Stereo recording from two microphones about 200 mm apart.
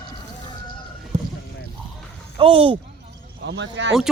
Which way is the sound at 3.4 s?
65° right (ahead or behind).